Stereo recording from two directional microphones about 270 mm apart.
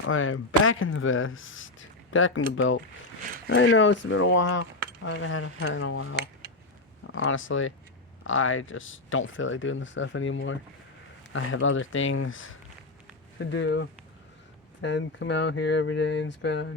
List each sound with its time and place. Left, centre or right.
0.0 s speech: left